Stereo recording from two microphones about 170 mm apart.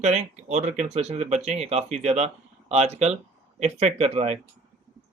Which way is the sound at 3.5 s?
40° right (ahead or behind).